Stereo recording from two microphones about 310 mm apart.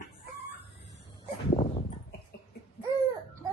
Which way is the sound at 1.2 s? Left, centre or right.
Left.